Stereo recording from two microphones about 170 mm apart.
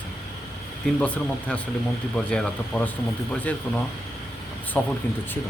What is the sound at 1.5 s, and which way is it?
Speech, 5° left (ahead or behind).